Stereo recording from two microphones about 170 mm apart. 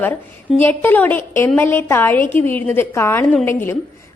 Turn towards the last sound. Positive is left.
turn(degrees=15)  # may be behind; listen again after turning